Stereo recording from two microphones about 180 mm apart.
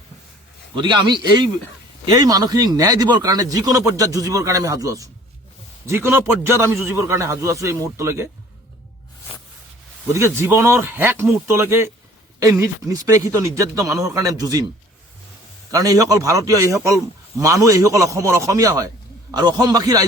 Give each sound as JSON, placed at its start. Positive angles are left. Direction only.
{"t": 0.8, "sound": "a man's voice", "side_deg": -25}
{"t": 10.2, "sound": "a man's voice", "side_deg": -15}
{"t": 15.7, "sound": "a man's voice", "side_deg": -20}